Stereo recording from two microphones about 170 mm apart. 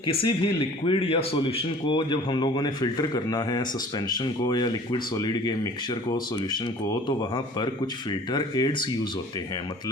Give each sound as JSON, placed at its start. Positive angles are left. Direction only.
{"t": 0.0, "sound": "speech", "side_deg": 30}